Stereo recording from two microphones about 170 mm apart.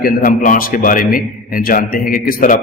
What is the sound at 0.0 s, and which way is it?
A man's voice, 55° left (ahead or behind).